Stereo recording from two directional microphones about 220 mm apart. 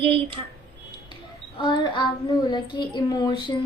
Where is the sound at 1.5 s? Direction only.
20° left (ahead or behind).